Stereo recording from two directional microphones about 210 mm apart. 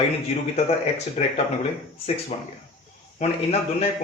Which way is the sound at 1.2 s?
35° left (ahead or behind).